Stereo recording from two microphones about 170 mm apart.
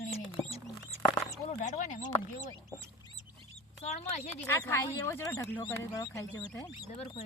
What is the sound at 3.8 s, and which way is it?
Speech, 40° left (ahead or behind).